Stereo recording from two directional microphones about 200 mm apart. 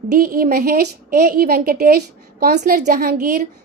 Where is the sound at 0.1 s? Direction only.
45° right (ahead or behind).